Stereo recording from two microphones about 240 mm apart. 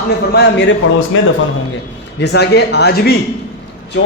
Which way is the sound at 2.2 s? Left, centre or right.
Left.